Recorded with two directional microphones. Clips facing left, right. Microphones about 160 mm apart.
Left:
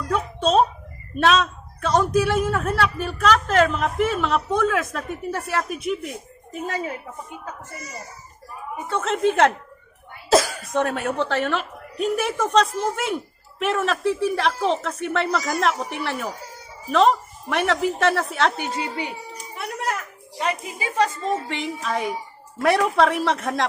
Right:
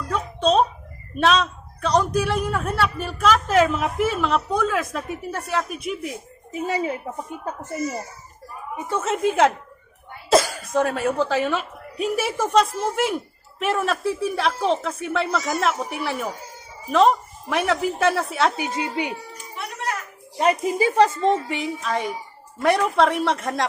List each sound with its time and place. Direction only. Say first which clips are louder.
0.1 s a man's voice: even; 5° left (ahead or behind)
6.5 s speech: right 3 dB; 15° right (ahead or behind)
8.9 s a man's voice: left 1 dB; 10° right (ahead or behind)
20.4 s speech: right 7 dB; 40° right (ahead or behind)
21.5 s a man's voice: right 1 dB; centre (ahead or behind)